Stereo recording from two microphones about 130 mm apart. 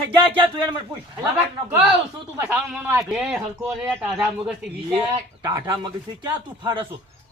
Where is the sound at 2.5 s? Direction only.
10° right (ahead or behind).